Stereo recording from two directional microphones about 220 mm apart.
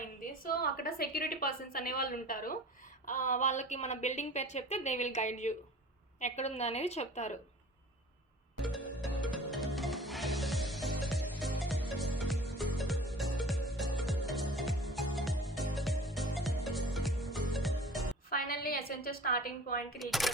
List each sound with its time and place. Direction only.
0.2 s speech: 40° left (ahead or behind)
9.5 s music: centre (ahead or behind)
18.3 s speech: 40° left (ahead or behind)
20.0 s speech: centre (ahead or behind)